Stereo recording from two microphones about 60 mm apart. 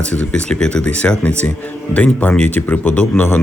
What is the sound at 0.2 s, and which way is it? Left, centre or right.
A man's voice, centre.